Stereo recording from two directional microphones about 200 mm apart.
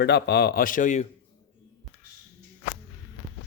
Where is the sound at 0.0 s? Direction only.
55° left (ahead or behind); by 1.0 s 40° left (ahead or behind).